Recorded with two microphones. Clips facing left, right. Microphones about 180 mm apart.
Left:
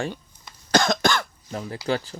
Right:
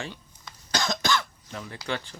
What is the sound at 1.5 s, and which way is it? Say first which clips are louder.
Speech: left 7 dB; 35° left (ahead or behind).